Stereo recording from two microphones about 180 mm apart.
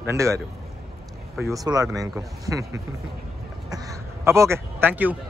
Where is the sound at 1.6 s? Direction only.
20° right (ahead or behind).